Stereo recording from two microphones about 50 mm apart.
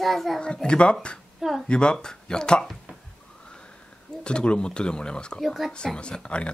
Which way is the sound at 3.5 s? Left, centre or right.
Centre.